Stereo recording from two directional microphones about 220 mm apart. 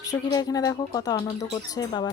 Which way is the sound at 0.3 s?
15° left (ahead or behind).